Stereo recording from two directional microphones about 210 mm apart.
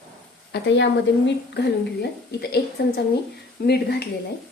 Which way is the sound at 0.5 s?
55° left (ahead or behind).